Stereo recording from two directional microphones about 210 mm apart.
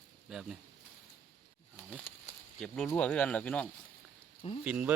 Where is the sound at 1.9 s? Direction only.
5° left (ahead or behind).